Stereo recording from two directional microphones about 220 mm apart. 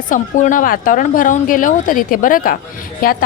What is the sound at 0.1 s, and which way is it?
A woman's voice, 35° left (ahead or behind).